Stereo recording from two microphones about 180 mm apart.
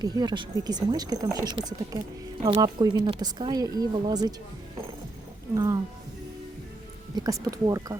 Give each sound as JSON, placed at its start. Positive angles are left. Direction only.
{"t": 0.0, "sound": "speech", "side_deg": -20}
{"t": 5.5, "sound": "speech", "side_deg": -20}
{"t": 7.2, "sound": "speech", "side_deg": -20}